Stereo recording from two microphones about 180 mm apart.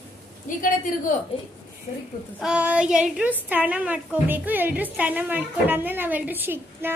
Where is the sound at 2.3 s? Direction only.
5° right (ahead or behind).